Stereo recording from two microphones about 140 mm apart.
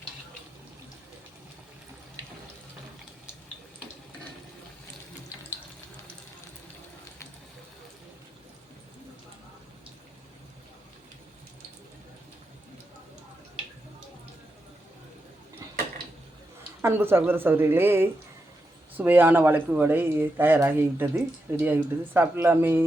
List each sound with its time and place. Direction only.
16.8 s speech: 15° right (ahead or behind)